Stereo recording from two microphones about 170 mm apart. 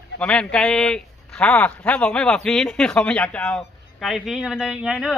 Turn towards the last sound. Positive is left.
turn(degrees=-5)  # may be behind; listen again after turning